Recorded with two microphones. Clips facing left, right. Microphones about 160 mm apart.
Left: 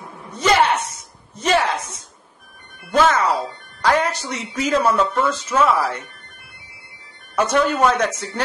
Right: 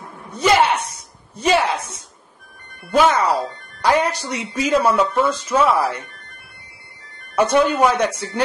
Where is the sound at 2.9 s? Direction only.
10° right (ahead or behind).